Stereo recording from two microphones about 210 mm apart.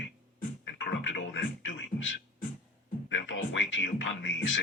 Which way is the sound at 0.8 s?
60° left (ahead or behind).